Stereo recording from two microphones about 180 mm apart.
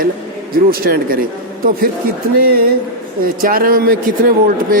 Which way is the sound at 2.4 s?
55° right (ahead or behind).